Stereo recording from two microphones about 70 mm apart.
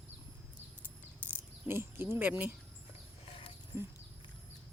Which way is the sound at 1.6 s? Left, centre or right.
Right.